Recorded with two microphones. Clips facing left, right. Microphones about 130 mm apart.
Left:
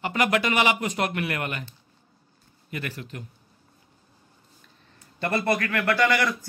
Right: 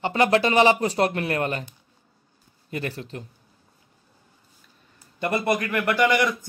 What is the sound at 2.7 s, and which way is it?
Speech, 30° right (ahead or behind).